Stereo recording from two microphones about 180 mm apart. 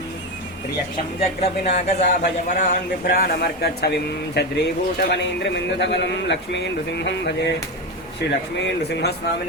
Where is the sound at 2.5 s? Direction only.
50° left (ahead or behind).